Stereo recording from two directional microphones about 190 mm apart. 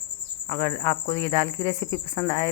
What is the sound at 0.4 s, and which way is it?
Speech, 15° left (ahead or behind).